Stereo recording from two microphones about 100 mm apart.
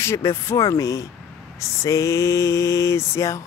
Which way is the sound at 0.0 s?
25° left (ahead or behind).